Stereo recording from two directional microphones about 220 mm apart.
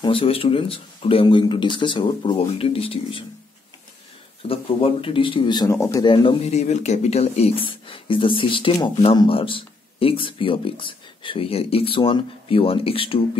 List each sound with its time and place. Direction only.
0.0 s speech: 25° left (ahead or behind)
4.5 s speech: 25° left (ahead or behind)